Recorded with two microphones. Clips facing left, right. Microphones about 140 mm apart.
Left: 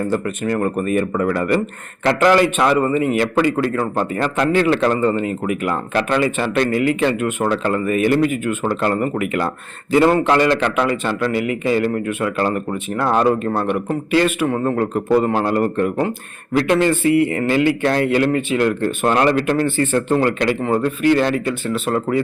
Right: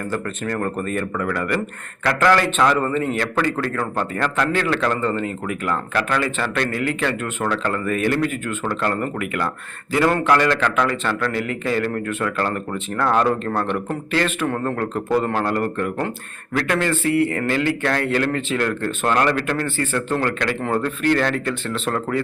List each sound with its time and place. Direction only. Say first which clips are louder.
0.4 s a man's voice: left 5 dB; 10° left (ahead or behind)
1.1 s a man's voice: left 5 dB; 25° left (ahead or behind)
20.6 s a man's voice: left 4 dB; 5° left (ahead or behind)